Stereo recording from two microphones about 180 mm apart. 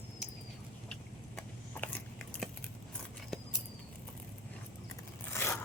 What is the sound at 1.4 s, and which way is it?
Biting, 10° left (ahead or behind).